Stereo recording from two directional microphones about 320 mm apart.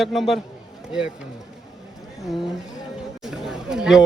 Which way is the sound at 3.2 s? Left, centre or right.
Centre.